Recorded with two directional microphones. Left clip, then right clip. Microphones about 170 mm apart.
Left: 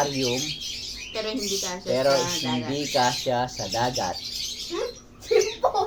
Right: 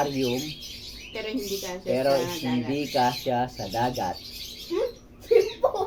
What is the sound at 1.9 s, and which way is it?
Speech, 15° right (ahead or behind).